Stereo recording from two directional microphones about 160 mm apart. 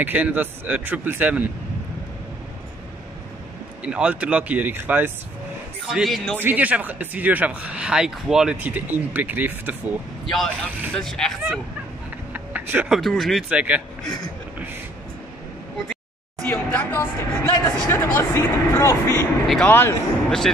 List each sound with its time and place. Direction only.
0.0 s speech: 10° right (ahead or behind)
3.8 s speech: 5° right (ahead or behind)
5.9 s speech: centre (ahead or behind)
6.4 s speech: 10° right (ahead or behind)
10.3 s speech: centre (ahead or behind)
12.3 s speech: 10° right (ahead or behind)
16.4 s speech: 15° left (ahead or behind)
19.4 s speech: centre (ahead or behind)
19.7 s speech: 15° left (ahead or behind)